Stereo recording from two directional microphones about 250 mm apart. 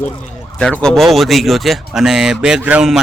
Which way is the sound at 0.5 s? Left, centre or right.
Centre.